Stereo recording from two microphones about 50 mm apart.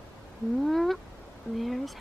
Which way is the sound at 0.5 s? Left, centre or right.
Centre.